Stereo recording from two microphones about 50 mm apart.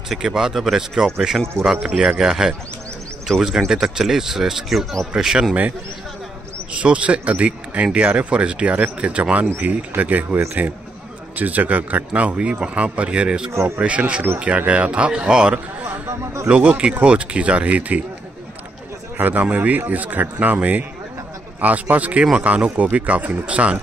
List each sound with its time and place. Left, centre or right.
0.2 s speech: centre
6.7 s speech: right
13.5 s speech: right
13.7 s speech: right
16.1 s a man's voice: right
16.4 s speech: right
19.1 s a man's voice: right